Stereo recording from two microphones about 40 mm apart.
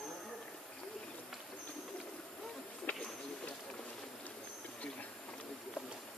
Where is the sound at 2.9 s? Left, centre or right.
Left.